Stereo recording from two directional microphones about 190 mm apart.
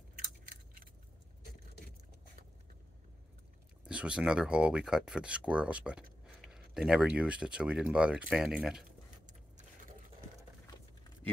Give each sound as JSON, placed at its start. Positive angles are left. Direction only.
{"t": 3.8, "sound": "speech", "side_deg": -5}
{"t": 8.8, "sound": "vehicle", "side_deg": -40}